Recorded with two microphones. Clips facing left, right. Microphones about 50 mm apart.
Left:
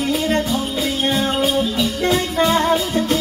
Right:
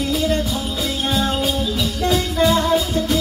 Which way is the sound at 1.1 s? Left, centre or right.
Left.